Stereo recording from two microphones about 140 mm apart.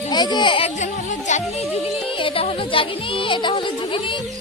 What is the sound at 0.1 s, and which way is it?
Speech, 30° left (ahead or behind).